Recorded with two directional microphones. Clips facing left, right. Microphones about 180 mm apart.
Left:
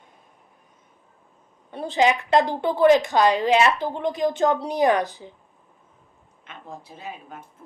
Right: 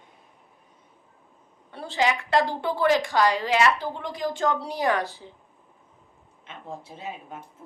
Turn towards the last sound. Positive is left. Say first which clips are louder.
# right 1 dB
turn(degrees=-25)  # may be behind; listen again after turning